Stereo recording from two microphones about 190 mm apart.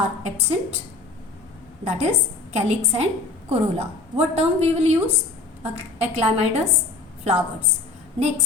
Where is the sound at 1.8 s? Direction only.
35° right (ahead or behind).